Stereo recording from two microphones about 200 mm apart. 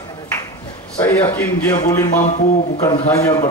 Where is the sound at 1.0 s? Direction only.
10° left (ahead or behind).